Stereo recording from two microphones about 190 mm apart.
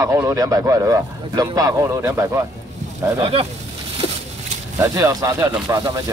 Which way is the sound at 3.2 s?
30° right (ahead or behind).